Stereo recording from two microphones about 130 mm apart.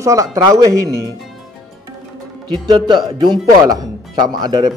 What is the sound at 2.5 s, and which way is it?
Speech, 35° right (ahead or behind).